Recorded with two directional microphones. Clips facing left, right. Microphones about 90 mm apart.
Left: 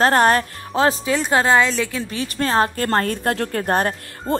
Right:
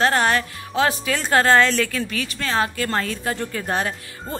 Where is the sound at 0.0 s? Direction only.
40° left (ahead or behind).